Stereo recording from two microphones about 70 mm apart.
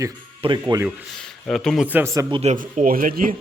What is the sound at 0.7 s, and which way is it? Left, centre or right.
Speech, right.